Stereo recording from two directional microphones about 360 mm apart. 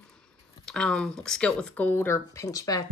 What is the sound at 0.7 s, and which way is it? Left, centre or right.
A woman's voice, centre.